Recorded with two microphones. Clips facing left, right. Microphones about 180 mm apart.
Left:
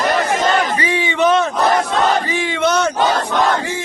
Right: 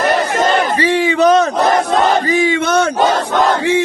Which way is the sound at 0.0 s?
50° right (ahead or behind).